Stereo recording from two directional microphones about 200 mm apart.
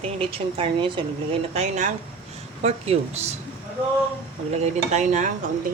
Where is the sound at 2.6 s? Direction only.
30° right (ahead or behind).